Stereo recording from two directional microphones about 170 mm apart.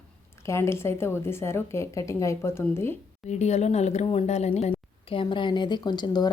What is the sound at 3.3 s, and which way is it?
Speech, 40° left (ahead or behind).